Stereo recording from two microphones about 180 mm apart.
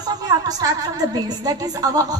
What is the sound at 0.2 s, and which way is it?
Music, 20° right (ahead or behind).